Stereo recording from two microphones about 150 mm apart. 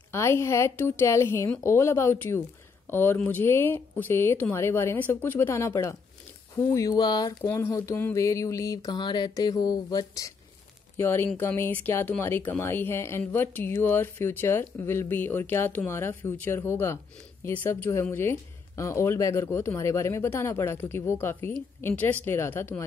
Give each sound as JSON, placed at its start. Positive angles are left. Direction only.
{"t": 0.1, "sound": "speech", "side_deg": 15}
{"t": 6.5, "sound": "a sound", "side_deg": 20}
{"t": 11.0, "sound": "speech", "side_deg": 15}